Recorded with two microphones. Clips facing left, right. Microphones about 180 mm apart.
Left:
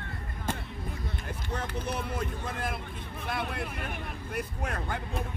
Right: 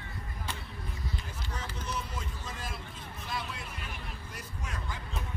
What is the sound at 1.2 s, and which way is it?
Vehicle, 60° left (ahead or behind).